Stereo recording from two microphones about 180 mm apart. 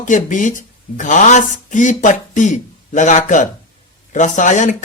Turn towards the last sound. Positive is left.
turn(degrees=45)  # may be behind; listen again after turning